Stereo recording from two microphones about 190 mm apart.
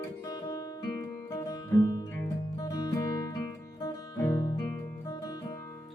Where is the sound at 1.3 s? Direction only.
20° left (ahead or behind).